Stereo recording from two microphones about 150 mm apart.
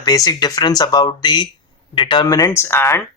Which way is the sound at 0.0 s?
25° left (ahead or behind).